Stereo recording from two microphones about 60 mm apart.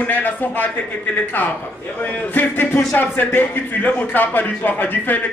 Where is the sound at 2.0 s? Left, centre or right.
Left.